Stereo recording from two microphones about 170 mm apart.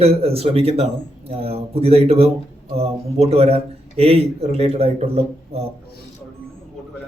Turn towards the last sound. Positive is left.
turn(degrees=-35)  # may be behind; listen again after turning